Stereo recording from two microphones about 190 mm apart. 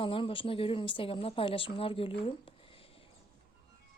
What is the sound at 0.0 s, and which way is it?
A woman's voice, 30° left (ahead or behind).